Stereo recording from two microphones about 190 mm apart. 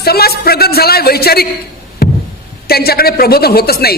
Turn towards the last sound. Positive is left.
turn(degrees=55)  # may be behind; listen again after turning